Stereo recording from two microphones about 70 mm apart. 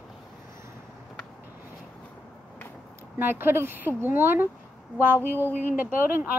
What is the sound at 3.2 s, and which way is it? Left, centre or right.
Speech, right.